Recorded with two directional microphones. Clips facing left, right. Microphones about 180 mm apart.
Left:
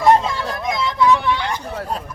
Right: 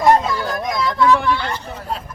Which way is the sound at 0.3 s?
25° left (ahead or behind).